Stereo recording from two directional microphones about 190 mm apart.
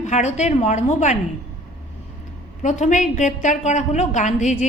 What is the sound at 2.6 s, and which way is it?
A woman's voice, 40° left (ahead or behind).